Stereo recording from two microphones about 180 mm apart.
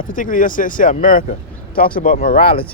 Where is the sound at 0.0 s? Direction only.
50° left (ahead or behind).